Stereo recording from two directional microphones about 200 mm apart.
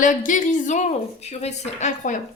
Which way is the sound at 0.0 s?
40° left (ahead or behind).